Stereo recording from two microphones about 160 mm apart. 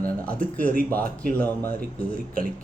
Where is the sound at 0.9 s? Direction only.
10° left (ahead or behind).